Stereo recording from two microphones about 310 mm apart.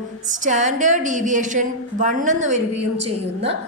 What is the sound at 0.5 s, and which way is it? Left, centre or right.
A woman's voice, right.